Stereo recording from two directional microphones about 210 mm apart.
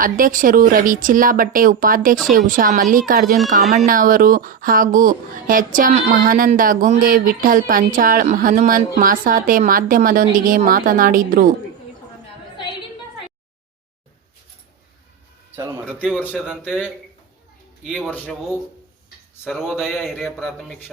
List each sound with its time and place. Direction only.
0.0 s speech: 40° right (ahead or behind)
3.3 s speech: centre (ahead or behind)
3.8 s speech: 40° right (ahead or behind)
15.5 s speech: 5° right (ahead or behind)
16.1 s speech: 10° left (ahead or behind)
19.5 s speech: centre (ahead or behind)